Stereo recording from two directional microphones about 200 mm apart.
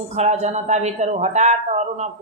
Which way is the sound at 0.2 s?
35° right (ahead or behind).